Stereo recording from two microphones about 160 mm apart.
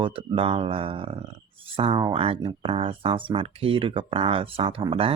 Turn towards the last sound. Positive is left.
turn(degrees=-35)  # may be behind; listen again after turning